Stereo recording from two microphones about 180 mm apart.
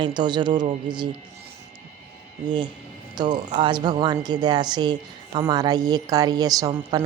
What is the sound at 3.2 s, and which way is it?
A woman's voice, 25° right (ahead or behind).